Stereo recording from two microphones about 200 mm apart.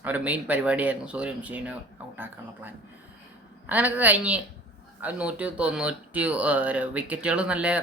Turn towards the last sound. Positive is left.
turn(degrees=-5)  # may be behind; listen again after turning